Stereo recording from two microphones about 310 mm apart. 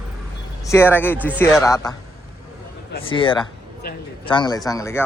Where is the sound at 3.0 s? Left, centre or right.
Centre.